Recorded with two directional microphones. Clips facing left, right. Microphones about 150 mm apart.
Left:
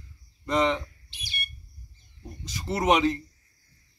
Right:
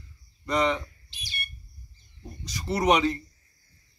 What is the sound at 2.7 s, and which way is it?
Speech, 15° left (ahead or behind).